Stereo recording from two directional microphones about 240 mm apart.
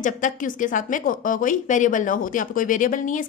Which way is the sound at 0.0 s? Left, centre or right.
Left.